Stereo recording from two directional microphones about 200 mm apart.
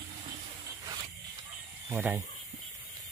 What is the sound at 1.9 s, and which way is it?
Speech, 10° right (ahead or behind).